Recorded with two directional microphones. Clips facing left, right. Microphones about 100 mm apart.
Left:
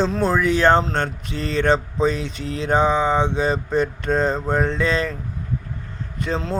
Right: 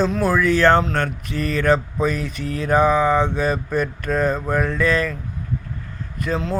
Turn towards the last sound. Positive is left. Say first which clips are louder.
# right 1 dB
turn(degrees=30)  # may be behind; listen again after turning